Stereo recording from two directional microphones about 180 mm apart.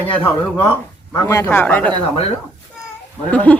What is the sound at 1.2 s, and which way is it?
Speech, 20° left (ahead or behind).